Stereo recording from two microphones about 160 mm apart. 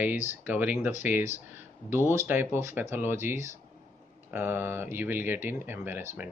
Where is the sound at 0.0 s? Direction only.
10° right (ahead or behind).